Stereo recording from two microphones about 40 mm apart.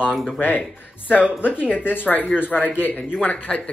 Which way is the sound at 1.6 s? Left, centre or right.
Left.